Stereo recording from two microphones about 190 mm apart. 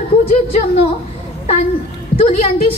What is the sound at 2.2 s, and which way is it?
Speech, 35° left (ahead or behind).